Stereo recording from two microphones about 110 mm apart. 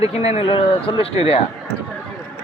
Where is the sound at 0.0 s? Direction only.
70° left (ahead or behind).